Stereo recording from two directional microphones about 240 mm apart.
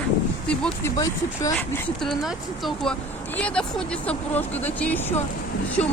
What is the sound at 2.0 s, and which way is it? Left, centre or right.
Speech, centre.